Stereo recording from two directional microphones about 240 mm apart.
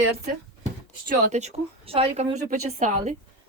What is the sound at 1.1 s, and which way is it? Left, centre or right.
Speech, right.